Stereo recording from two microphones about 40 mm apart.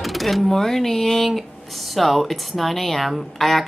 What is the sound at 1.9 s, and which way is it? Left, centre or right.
Speech, centre.